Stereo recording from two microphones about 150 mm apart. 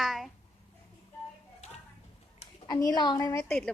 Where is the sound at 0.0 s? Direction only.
Centre (ahead or behind).